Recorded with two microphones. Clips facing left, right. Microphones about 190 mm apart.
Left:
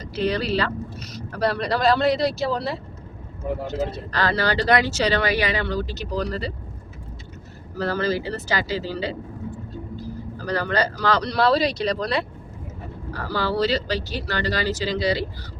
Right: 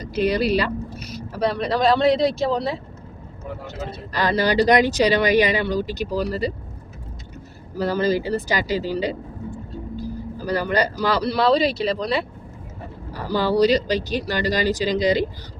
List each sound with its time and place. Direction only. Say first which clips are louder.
0.0 s a sound: right 4 dB; 15° right (ahead or behind)
1.4 s speech: right 2 dB; centre (ahead or behind)
4.1 s speech: right 5 dB; 15° right (ahead or behind)
7.8 s speech: right 3 dB; 15° right (ahead or behind)
10.3 s speech: right 2 dB; 10° right (ahead or behind)
13.1 s speech: right 5 dB; 15° right (ahead or behind)